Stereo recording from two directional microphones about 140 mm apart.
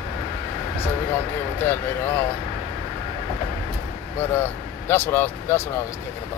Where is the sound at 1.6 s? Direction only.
15° left (ahead or behind).